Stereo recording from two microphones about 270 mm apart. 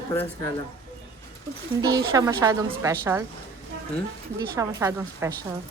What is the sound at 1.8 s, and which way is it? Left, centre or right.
A woman's voice, centre.